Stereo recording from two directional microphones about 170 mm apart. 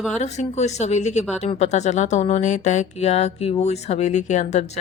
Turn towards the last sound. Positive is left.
turn(degrees=40)  # may be behind; listen again after turning